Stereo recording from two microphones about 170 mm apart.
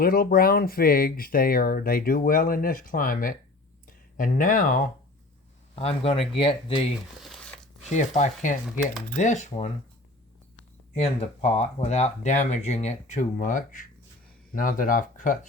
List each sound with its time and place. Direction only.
0.0 s speech: 60° left (ahead or behind)
5.7 s speech: 35° left (ahead or behind)
7.9 s speech: 45° left (ahead or behind)